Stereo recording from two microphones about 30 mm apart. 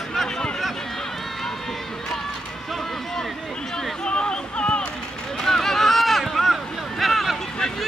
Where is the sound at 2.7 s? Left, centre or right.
Centre.